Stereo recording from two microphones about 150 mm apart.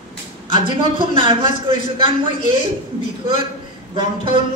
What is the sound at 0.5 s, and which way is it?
Speech, 30° right (ahead or behind).